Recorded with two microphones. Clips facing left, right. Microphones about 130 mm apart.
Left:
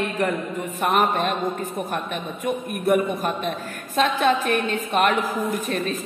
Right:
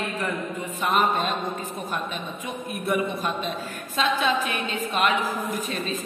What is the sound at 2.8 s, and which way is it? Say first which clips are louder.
A woman's voice: left 5 dB; 50° left (ahead or behind).